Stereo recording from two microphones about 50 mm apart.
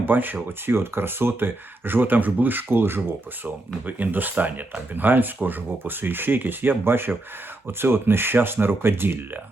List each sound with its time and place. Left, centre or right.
0.0 s speech: right
3.4 s speech: right